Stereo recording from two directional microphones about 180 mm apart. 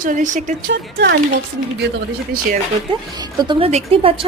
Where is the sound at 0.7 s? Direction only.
65° right (ahead or behind).